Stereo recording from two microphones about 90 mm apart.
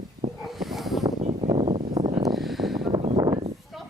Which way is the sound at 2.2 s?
Centre (ahead or behind).